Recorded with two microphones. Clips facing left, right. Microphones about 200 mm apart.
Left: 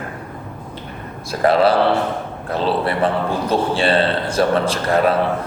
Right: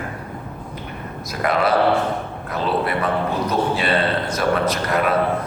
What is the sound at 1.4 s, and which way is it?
A man's voice, 30° left (ahead or behind).